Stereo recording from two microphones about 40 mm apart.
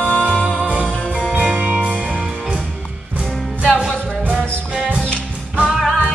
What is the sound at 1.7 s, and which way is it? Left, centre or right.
Music, right.